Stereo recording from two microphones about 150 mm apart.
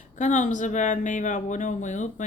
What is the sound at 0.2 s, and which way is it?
A woman's voice, 55° left (ahead or behind).